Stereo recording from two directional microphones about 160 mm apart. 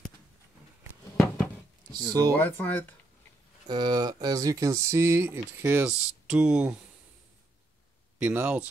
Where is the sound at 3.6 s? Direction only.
25° right (ahead or behind); by 6.8 s 5° right (ahead or behind).